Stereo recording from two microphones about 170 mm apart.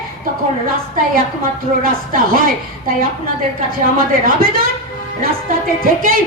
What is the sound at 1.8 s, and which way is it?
Speech, 55° right (ahead or behind).